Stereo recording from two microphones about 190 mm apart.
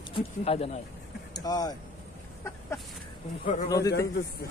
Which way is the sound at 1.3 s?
20° left (ahead or behind).